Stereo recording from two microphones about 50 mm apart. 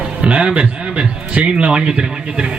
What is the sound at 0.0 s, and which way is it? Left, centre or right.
Music, right.